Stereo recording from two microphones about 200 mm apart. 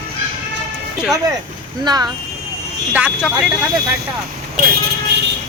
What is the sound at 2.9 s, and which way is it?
Speech, 5° right (ahead or behind).